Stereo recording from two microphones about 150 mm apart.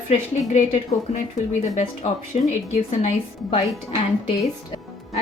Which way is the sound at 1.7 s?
50° left (ahead or behind).